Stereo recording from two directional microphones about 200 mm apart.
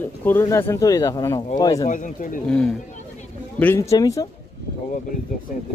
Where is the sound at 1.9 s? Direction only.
40° left (ahead or behind).